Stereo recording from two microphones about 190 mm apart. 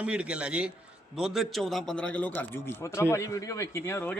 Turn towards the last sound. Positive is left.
turn(degrees=15)  # may be behind; listen again after turning